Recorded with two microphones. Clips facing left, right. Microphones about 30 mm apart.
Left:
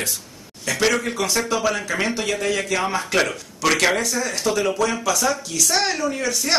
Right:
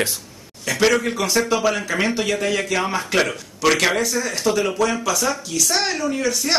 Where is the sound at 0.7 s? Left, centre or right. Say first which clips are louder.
Right 2 dB; centre.